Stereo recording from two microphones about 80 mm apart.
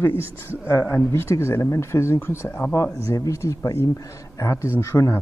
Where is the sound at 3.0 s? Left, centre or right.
Left.